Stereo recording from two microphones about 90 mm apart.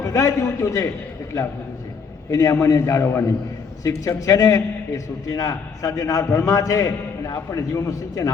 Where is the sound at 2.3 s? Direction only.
40° left (ahead or behind).